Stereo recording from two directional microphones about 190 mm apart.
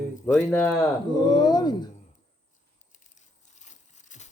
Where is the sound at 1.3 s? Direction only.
20° left (ahead or behind).